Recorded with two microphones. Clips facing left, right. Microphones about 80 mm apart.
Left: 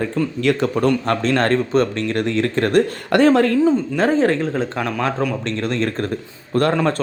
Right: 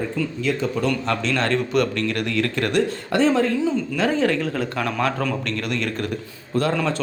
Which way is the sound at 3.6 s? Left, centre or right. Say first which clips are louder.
Left 5 dB; left.